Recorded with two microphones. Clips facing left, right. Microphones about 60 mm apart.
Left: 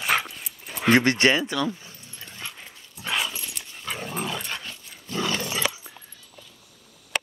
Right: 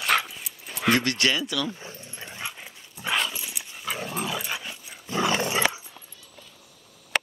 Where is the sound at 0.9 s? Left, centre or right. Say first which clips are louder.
Left 7 dB; left.